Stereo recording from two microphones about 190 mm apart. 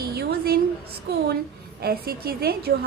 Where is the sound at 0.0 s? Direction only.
55° right (ahead or behind).